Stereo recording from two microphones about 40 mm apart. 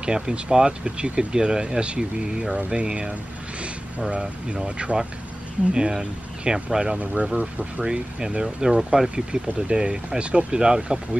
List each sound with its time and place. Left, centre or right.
0.0 s speech: right
7.8 s speech: right
9.1 s speech: right